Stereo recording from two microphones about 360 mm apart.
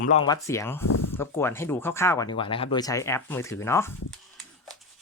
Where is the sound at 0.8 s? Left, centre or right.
Left.